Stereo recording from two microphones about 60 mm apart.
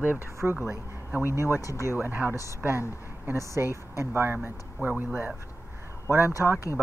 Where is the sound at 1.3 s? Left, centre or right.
Right.